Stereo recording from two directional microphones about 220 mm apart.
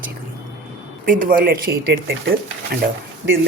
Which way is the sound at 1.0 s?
40° right (ahead or behind).